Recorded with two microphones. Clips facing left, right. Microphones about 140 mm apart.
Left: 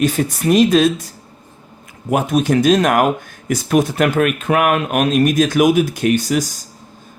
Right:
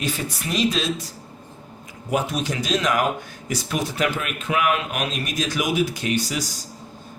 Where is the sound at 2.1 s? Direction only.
55° left (ahead or behind).